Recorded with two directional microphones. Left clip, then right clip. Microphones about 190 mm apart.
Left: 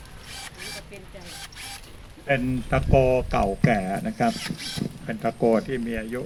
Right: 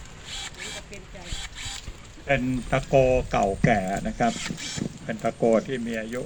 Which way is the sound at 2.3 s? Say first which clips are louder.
Even; 45° left (ahead or behind).